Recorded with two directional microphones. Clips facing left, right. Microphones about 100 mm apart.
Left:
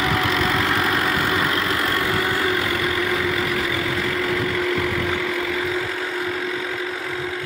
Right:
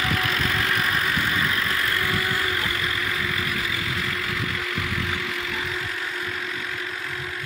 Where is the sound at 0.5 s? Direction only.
90° left.